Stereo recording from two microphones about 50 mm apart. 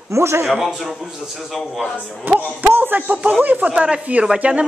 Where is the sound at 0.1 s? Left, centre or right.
Right.